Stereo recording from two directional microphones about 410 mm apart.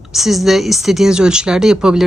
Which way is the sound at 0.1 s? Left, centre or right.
Centre.